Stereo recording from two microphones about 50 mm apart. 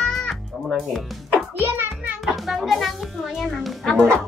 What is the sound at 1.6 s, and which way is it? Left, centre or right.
Music, right.